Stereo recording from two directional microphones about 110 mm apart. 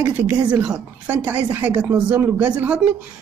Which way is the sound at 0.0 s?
15° right (ahead or behind).